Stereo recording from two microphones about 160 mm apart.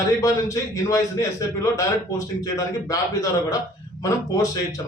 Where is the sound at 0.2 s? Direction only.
20° left (ahead or behind).